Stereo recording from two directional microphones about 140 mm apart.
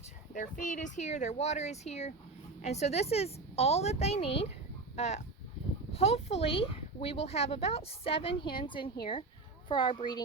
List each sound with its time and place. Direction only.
0.3 s a woman's voice: 70° left (ahead or behind); by 10.2 s 35° left (ahead or behind)